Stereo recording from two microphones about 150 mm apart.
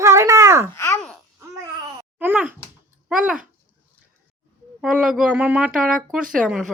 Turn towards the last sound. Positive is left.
turn(degrees=0)  # may be behind; listen again after turning